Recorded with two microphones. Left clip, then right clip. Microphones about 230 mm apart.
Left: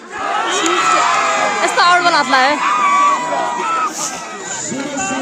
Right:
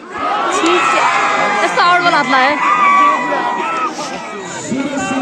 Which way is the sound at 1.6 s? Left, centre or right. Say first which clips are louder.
Left 1 dB; centre.